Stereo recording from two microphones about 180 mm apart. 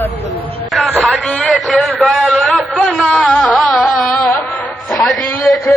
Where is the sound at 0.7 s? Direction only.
Centre (ahead or behind).